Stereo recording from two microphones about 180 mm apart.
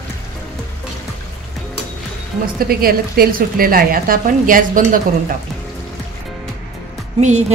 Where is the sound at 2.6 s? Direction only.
55° right (ahead or behind).